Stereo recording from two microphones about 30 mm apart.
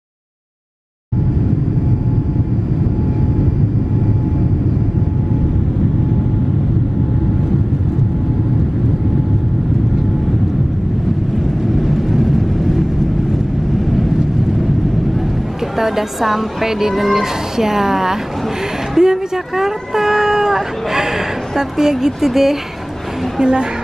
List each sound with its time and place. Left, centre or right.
11.3 s vehicle: centre
15.8 s speech: centre
21.5 s speech: centre
23.4 s a woman's voice: right